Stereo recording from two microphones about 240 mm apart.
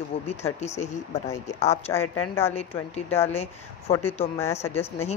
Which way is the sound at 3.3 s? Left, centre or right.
Left.